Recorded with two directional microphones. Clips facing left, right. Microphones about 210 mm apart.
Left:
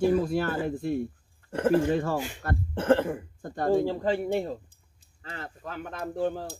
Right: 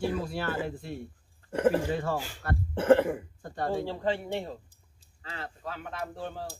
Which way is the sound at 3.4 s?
45° left (ahead or behind).